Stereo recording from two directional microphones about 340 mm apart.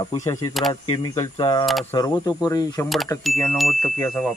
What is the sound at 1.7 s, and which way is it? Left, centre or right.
Speech, centre.